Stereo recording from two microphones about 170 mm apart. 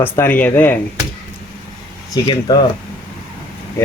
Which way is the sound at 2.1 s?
25° left (ahead or behind).